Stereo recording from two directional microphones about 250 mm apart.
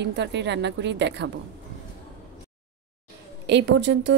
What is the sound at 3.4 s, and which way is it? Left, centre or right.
Speech, right.